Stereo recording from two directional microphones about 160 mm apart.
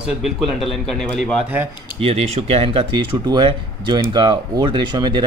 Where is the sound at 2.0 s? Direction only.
40° right (ahead or behind).